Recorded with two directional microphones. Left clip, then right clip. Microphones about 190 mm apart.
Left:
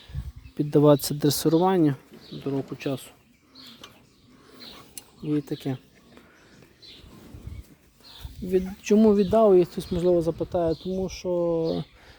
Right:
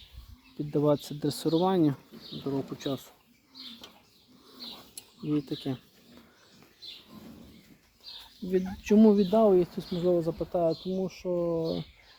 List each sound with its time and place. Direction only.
0.7 s speech: 75° left (ahead or behind); by 2.8 s 25° left (ahead or behind)
5.3 s speech: 30° left (ahead or behind)
8.4 s speech: 40° left (ahead or behind); by 11.9 s 60° left (ahead or behind)